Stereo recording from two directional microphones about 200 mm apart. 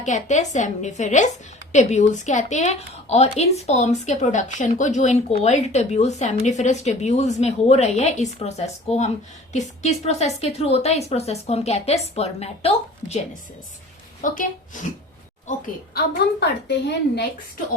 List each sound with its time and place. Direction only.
0.0 s a woman's voice: 35° left (ahead or behind)
14.2 s a woman's voice: 40° left (ahead or behind)
16.0 s a woman's voice: 55° left (ahead or behind)